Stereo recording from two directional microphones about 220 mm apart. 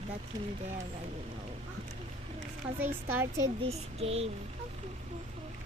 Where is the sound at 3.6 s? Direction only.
25° right (ahead or behind).